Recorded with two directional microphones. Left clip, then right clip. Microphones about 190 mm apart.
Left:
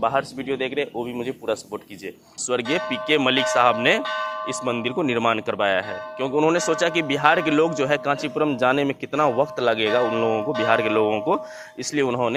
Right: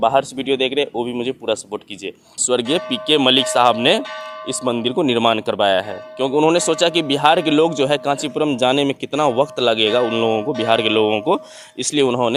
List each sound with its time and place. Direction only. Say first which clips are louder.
0.0 s speech: right 6 dB; 50° right (ahead or behind)
4.0 s speech: left 3 dB; 30° right (ahead or behind)
4.4 s a man's voice: right 4 dB; 40° right (ahead or behind)